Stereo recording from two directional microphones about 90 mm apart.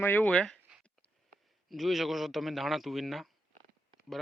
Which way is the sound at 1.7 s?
Centre (ahead or behind).